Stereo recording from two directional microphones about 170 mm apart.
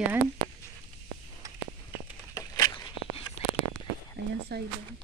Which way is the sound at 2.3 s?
20° left (ahead or behind).